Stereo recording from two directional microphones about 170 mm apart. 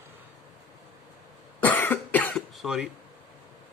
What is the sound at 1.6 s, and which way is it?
Cough, 10° left (ahead or behind).